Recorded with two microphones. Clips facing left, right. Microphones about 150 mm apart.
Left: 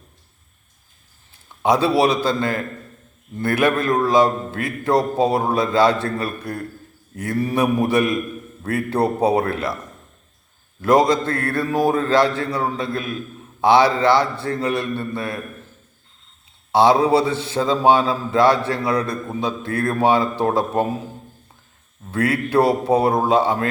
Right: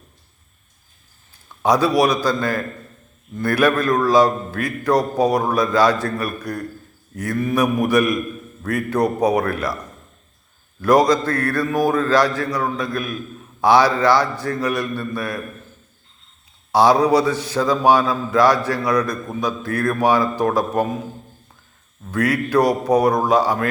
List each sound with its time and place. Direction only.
1.6 s a man's voice: 25° left (ahead or behind)
10.8 s a man's voice: 25° left (ahead or behind)
16.7 s a man's voice: 25° left (ahead or behind)
22.1 s a man's voice: 25° left (ahead or behind)